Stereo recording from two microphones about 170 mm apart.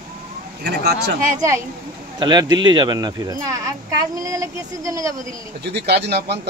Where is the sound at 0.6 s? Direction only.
70° right (ahead or behind).